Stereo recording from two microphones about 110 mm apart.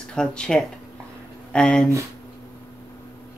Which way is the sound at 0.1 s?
5° left (ahead or behind).